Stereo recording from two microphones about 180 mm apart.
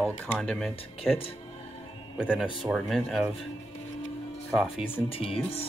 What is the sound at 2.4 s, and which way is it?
Speech, 5° right (ahead or behind).